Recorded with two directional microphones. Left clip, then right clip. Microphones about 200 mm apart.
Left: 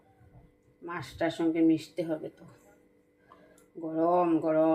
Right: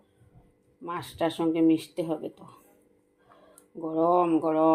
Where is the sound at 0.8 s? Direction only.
35° right (ahead or behind).